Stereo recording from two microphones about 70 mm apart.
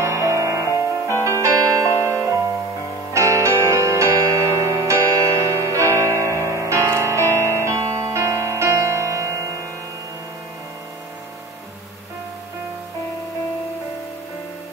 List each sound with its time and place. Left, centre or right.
0.0 s music: right
7.2 s music: left
7.6 s music: right